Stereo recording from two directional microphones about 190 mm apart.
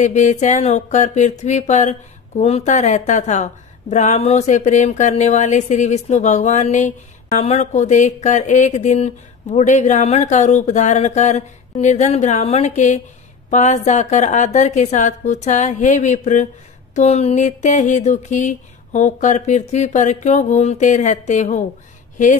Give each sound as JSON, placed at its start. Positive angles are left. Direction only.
{"t": 0.0, "sound": "speech", "side_deg": 40}